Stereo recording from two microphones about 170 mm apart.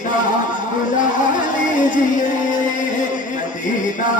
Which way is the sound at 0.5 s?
50° left (ahead or behind).